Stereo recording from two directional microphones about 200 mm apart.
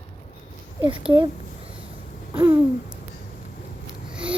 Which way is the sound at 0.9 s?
25° right (ahead or behind).